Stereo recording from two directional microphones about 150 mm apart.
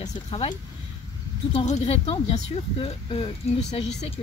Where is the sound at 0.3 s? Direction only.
40° left (ahead or behind).